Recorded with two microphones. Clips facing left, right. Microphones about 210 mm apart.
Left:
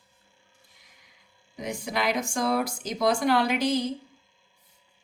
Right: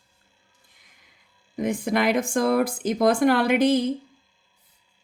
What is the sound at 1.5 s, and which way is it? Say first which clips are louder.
Speech: right 7 dB; 55° right (ahead or behind).